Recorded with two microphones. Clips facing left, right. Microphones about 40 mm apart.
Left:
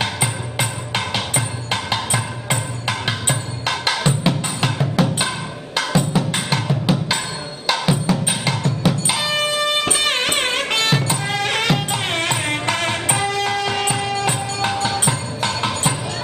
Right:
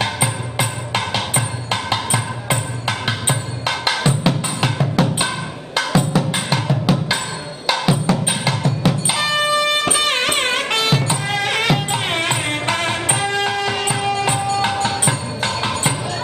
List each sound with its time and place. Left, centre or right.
0.0 s music: centre